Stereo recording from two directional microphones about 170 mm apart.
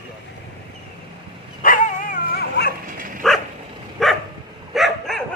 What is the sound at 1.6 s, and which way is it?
Dog, 55° left (ahead or behind).